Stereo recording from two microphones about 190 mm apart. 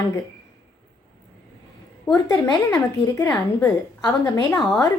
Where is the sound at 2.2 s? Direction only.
20° left (ahead or behind).